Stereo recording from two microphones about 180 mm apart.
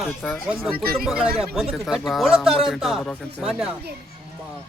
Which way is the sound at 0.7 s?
55° right (ahead or behind).